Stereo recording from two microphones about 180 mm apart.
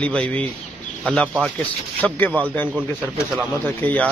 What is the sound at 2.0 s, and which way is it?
Speech, 10° left (ahead or behind).